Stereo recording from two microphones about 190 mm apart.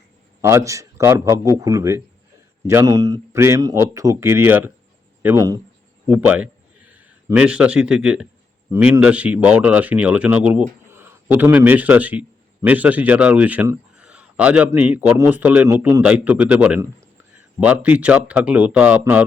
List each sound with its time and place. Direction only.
0.4 s a man's voice: 15° right (ahead or behind)